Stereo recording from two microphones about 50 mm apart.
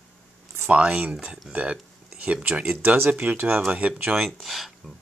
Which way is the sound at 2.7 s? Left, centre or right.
Right.